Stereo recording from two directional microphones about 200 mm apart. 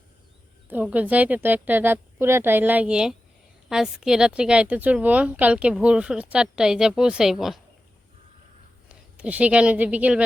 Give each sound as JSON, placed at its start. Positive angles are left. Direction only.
{"t": 0.7, "sound": "a woman's voice", "side_deg": -10}
{"t": 8.9, "sound": "speech", "side_deg": -5}